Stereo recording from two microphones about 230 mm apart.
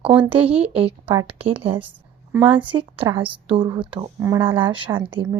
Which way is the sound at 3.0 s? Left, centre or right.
Right.